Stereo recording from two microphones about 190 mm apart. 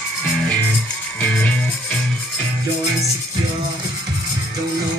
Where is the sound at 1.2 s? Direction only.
10° left (ahead or behind).